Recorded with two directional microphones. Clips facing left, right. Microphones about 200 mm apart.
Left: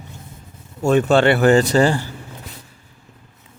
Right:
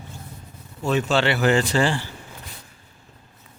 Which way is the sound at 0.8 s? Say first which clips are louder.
Left 7 dB; 50° left (ahead or behind).